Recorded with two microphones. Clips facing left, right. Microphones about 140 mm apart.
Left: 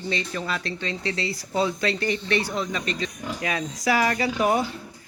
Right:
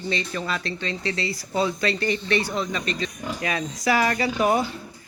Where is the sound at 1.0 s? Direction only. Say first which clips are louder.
Right 1 dB; 20° left (ahead or behind); by 4.2 s 5° left (ahead or behind).